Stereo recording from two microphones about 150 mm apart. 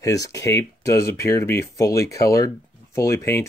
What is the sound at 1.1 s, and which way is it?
Speech, 15° left (ahead or behind).